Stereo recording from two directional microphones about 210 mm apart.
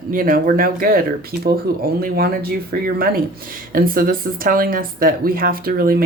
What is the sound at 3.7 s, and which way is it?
Speech, 40° right (ahead or behind).